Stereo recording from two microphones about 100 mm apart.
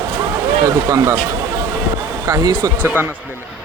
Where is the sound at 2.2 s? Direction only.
40° right (ahead or behind).